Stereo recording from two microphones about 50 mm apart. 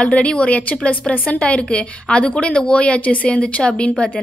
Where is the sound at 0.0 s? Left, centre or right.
Left.